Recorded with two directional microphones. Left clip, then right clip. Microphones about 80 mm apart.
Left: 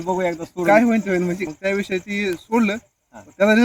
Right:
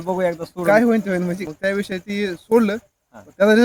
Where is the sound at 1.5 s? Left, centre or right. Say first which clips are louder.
Even; right.